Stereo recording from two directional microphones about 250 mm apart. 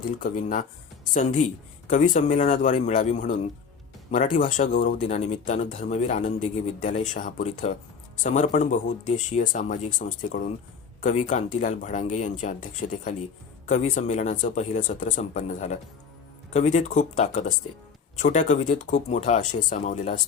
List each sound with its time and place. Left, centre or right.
0.0 s speech: left